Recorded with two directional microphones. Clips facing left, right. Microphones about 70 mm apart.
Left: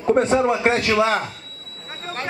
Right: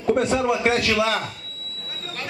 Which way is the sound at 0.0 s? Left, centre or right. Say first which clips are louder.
Left 3 dB; left.